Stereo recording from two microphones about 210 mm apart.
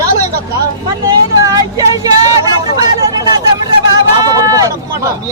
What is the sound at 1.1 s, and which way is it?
A man's voice, 15° right (ahead or behind).